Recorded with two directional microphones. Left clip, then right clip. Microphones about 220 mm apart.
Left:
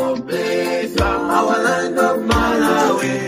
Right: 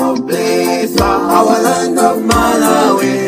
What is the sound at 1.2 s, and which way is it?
Music, 35° right (ahead or behind).